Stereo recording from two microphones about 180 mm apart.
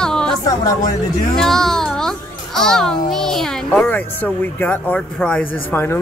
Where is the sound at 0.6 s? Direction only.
20° left (ahead or behind).